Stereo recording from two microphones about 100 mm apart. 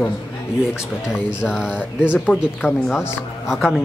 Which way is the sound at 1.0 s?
5° right (ahead or behind).